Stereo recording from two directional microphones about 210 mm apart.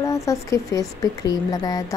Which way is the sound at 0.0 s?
15° left (ahead or behind).